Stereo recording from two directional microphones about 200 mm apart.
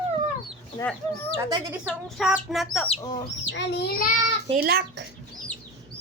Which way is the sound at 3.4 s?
65° left (ahead or behind).